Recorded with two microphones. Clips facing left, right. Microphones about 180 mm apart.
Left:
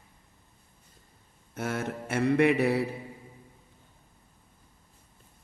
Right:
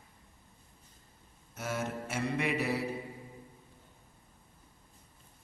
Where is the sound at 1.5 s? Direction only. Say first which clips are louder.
Left 4 dB; 60° left (ahead or behind).